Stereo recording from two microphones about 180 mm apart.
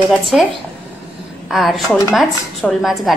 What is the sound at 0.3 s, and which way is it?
Speech, centre (ahead or behind).